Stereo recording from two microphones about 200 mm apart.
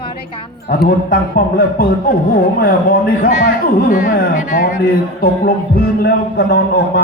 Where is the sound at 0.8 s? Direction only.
45° left (ahead or behind).